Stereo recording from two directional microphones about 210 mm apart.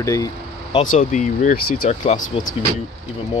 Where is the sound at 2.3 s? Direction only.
25° left (ahead or behind).